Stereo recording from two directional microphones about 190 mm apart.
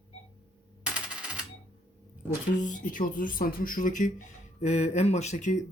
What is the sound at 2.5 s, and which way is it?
Speech, 45° left (ahead or behind).